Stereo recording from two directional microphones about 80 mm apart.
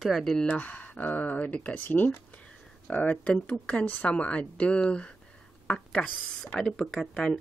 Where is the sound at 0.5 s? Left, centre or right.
Left.